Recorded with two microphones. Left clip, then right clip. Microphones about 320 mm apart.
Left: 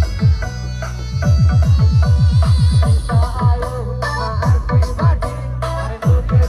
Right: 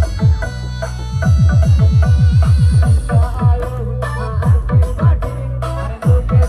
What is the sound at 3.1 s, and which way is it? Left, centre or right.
Music, centre.